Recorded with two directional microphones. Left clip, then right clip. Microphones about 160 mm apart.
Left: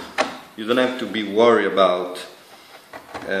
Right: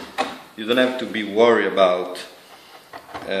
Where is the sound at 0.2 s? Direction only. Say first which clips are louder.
Left 2 dB; 5° right (ahead or behind).